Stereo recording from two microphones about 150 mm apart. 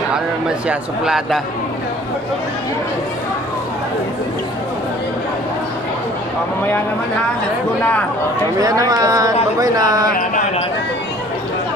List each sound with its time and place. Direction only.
0.7 s speech: 5° right (ahead or behind)
8.5 s speech: 25° right (ahead or behind)